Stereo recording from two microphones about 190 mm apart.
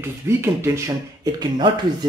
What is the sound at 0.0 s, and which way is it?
Speech, 15° right (ahead or behind).